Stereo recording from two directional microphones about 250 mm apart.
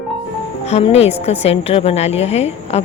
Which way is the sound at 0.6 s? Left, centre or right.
Left.